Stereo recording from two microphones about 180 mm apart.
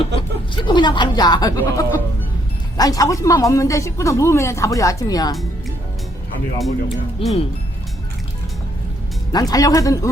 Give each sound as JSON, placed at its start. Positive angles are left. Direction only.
{"t": 0.0, "sound": "a woman's voice", "side_deg": 30}
{"t": 7.2, "sound": "speech", "side_deg": 30}
{"t": 9.3, "sound": "a woman's voice", "side_deg": 20}